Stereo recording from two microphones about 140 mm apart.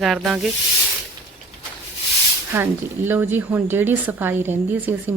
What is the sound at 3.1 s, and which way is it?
A woman's voice, 15° right (ahead or behind).